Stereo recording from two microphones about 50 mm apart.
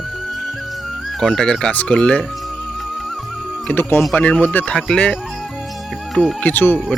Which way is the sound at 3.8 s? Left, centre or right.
Left.